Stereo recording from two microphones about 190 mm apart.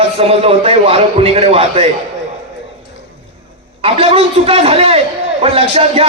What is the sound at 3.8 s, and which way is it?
A man's voice, 30° right (ahead or behind).